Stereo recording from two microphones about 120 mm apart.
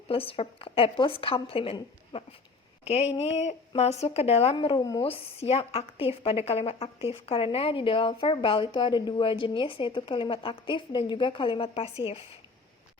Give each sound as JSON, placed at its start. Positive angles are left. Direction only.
{"t": 0.1, "sound": "a woman's voice", "side_deg": 50}
{"t": 2.8, "sound": "a woman's voice", "side_deg": 65}
{"t": 4.5, "sound": "speech", "side_deg": 40}
{"t": 4.9, "sound": "a woman's voice", "side_deg": 50}